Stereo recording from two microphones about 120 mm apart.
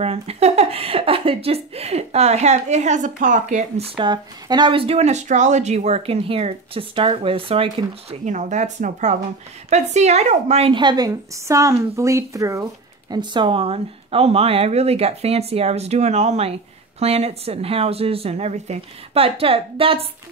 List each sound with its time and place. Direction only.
0.0 s speech: 55° right (ahead or behind)
4.0 s speech: 40° right (ahead or behind)
8.3 s speech: 80° right
9.7 s a woman's voice: 70° right (ahead or behind)
10.7 s a woman's voice: 40° right (ahead or behind)
11.1 s speech: 25° right (ahead or behind)
13.1 s speech: 40° right (ahead or behind)